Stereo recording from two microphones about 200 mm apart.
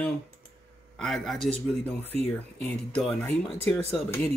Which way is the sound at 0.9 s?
Centre (ahead or behind).